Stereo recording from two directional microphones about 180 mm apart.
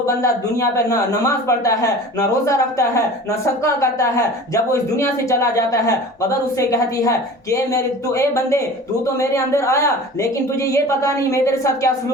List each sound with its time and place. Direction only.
0.0 s a woman's voice: 15° left (ahead or behind)